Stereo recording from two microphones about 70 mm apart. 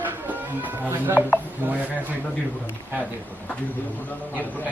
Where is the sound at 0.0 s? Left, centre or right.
Right.